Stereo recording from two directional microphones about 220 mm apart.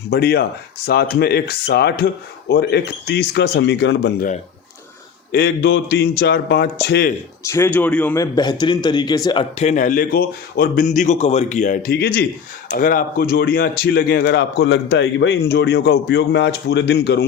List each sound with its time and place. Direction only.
0.1 s speech: 45° left (ahead or behind)
5.6 s speech: 50° left (ahead or behind)
7.4 s a man's voice: 10° left (ahead or behind); by 17.2 s 50° left (ahead or behind)